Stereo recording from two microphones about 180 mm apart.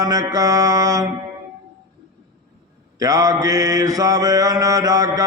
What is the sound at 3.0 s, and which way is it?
Mantra, 20° right (ahead or behind).